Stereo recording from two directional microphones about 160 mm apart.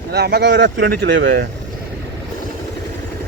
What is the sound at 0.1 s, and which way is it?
Speech, 90° right.